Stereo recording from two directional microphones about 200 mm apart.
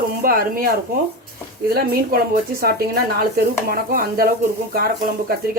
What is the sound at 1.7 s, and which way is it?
Speech, 45° right (ahead or behind).